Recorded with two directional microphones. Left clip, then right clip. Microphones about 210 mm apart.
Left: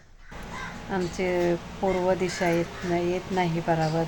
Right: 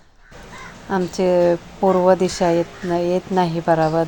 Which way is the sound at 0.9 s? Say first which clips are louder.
Right 10 dB; 25° right (ahead or behind).